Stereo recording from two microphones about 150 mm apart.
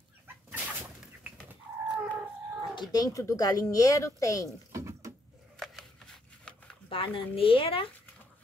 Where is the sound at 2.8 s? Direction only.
25° left (ahead or behind).